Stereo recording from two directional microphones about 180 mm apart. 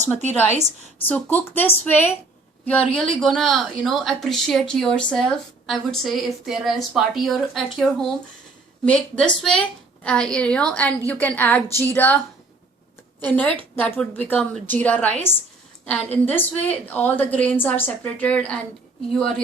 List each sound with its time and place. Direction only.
1.0 s a woman's voice: 10° left (ahead or behind)
13.2 s a woman's voice: 10° left (ahead or behind)